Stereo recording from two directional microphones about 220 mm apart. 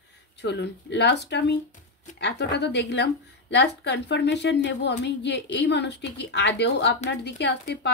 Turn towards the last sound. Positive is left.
turn(degrees=50)  # may be behind; listen again after turning